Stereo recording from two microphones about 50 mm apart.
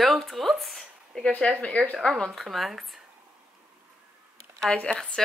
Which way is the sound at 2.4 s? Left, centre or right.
Centre.